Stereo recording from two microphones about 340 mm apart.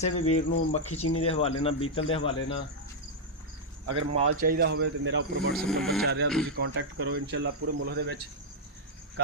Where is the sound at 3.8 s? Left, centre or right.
Right.